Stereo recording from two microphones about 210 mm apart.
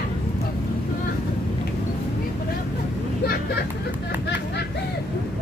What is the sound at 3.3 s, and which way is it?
Vehicle, 50° left (ahead or behind).